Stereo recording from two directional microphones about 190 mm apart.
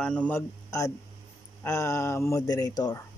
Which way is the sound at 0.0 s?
5° left (ahead or behind).